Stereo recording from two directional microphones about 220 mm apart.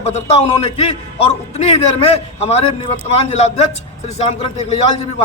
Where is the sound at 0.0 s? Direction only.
30° left (ahead or behind).